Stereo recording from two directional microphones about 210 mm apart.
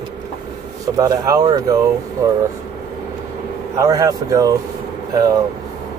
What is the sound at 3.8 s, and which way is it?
Speech, 15° right (ahead or behind).